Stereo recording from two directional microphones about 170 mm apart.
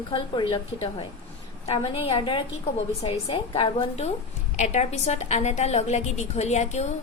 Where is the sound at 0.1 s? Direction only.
30° left (ahead or behind).